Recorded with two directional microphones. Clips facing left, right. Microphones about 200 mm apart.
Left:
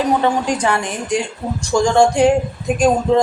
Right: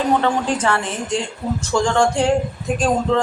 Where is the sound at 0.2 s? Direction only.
15° left (ahead or behind).